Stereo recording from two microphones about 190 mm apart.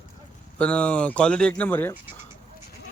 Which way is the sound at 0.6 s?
5° left (ahead or behind).